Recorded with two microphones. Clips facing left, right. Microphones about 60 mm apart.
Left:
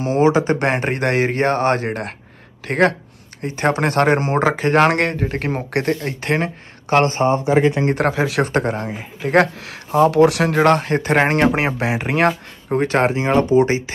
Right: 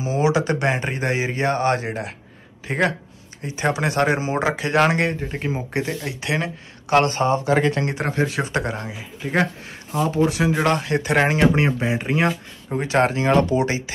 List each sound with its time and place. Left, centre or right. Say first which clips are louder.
0.0 s speech: left 5 dB; left
0.7 s speech: left 3 dB; left
2.6 s speech: left 5 dB; left
3.4 s speech: left 4 dB; left
7.5 s speech: left 4 dB; centre
7.9 s speech: left 5 dB; left
8.5 s speech: left 5 dB; left
9.2 s speech: left 6 dB; left
10.6 s speech: left 5 dB; left
11.5 s speech: left 1 dB; left
12.6 s speech: left 3 dB; left
13.3 s speech: left 4 dB; left